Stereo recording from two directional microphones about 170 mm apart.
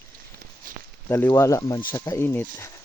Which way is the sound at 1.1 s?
15° left (ahead or behind).